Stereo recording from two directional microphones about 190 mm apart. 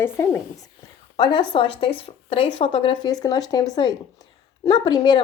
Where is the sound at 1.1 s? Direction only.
25° left (ahead or behind).